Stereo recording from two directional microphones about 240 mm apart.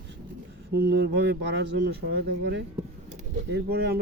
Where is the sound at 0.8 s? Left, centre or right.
Right.